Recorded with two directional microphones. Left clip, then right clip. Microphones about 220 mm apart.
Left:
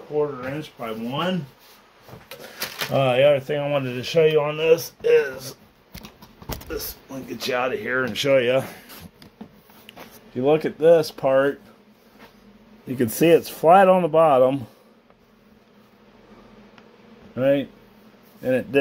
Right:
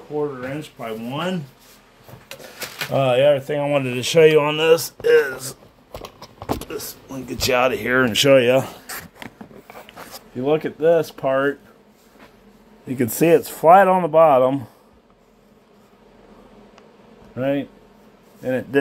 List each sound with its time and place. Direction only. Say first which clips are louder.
0.1 s speech: even; 25° right (ahead or behind)
2.4 s speech: even; 10° right (ahead or behind); by 5.6 s 30° right (ahead or behind)
6.7 s speech: right 1 dB; 35° right (ahead or behind)
8.4 s speech: right 4 dB; 25° right (ahead or behind)
10.4 s speech: left 1 dB; centre (ahead or behind)
12.8 s speech: right 1 dB; 10° right (ahead or behind)
17.4 s speech: left 3 dB; 5° left (ahead or behind)